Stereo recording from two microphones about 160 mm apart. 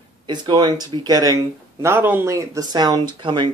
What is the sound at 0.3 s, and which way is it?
Speech, 30° right (ahead or behind).